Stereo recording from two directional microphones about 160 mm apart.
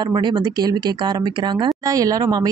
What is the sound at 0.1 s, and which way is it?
A woman's voice, 30° right (ahead or behind).